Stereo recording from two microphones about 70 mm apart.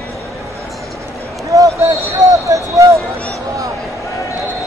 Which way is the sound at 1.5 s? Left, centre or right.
Right.